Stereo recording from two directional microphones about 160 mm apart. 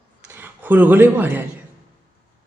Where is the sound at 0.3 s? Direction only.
15° right (ahead or behind).